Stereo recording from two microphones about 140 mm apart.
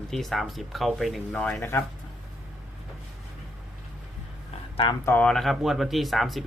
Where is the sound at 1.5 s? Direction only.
20° left (ahead or behind).